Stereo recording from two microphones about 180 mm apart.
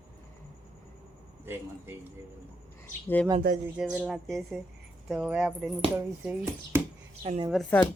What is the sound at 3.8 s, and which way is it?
Speech, 5° right (ahead or behind).